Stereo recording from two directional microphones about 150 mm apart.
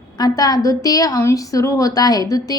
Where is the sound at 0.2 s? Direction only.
25° left (ahead or behind).